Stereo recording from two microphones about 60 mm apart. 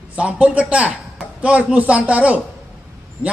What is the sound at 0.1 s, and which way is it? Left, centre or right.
A man's voice, centre.